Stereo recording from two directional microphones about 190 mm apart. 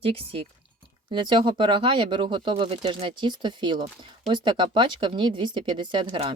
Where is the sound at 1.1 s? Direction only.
25° right (ahead or behind).